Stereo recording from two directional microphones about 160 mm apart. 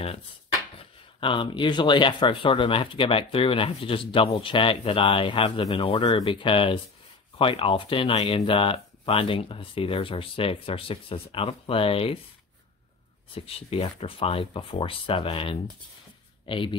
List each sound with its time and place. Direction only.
1.2 s speech: 30° left (ahead or behind)
13.3 s speech: 35° left (ahead or behind)